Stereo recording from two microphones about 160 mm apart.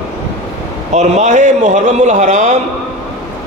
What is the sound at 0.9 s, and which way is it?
A man's voice, 45° right (ahead or behind).